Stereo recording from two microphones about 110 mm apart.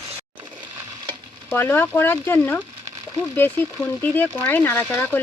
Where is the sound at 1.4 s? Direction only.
20° left (ahead or behind).